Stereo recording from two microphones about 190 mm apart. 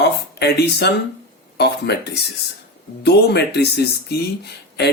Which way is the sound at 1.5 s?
60° left (ahead or behind).